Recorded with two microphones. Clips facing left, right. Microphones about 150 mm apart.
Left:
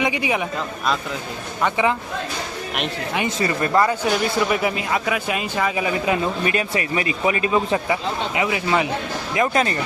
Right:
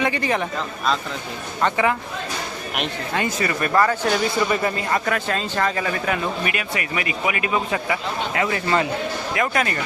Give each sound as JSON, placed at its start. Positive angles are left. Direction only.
{"t": 0.0, "sound": "speech", "side_deg": 10}
{"t": 1.6, "sound": "speech", "side_deg": 20}
{"t": 3.2, "sound": "speech", "side_deg": 25}
{"t": 3.7, "sound": "speech", "side_deg": 15}
{"t": 4.1, "sound": "speech", "side_deg": 5}
{"t": 6.4, "sound": "a man's voice", "side_deg": 30}
{"t": 8.3, "sound": "speech", "side_deg": 15}
{"t": 9.3, "sound": "speech", "side_deg": 25}